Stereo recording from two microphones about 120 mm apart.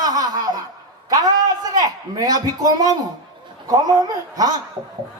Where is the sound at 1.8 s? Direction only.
30° right (ahead or behind).